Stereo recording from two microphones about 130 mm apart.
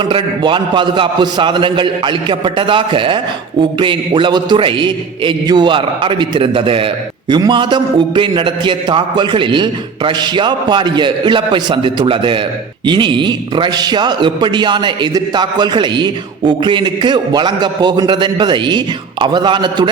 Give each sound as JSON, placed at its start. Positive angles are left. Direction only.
{"t": 0.0, "sound": "a man's voice", "side_deg": -40}